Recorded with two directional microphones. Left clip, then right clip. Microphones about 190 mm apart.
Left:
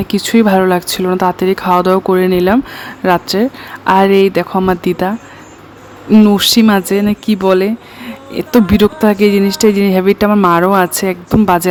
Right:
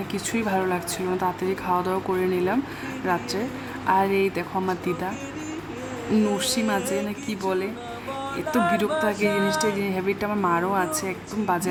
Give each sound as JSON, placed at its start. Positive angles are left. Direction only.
{"t": 0.1, "sound": "speech", "side_deg": 45}
{"t": 6.2, "sound": "speech", "side_deg": 45}